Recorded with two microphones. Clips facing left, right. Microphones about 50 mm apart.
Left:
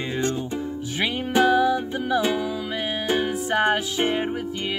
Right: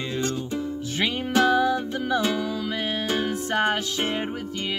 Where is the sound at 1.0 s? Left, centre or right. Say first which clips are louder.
Left 1 dB; centre.